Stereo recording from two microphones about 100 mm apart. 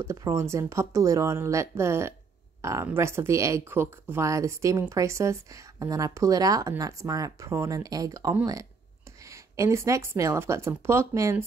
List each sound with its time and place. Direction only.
0.0 s speech: 30° right (ahead or behind)